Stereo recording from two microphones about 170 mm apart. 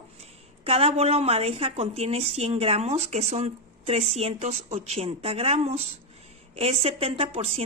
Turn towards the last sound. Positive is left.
turn(degrees=-35)  # may be behind; listen again after turning